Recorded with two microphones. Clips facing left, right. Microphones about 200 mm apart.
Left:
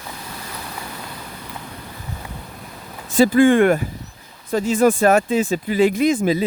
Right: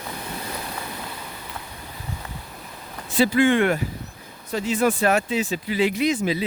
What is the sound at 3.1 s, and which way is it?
Speech, 45° left (ahead or behind).